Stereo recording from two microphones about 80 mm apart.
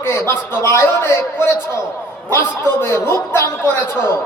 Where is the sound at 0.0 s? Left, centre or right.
Left.